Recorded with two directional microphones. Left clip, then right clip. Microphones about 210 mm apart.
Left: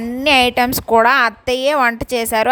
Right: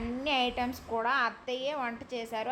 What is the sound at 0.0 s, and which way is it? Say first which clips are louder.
A woman's voice: left 16 dB; 50° left (ahead or behind).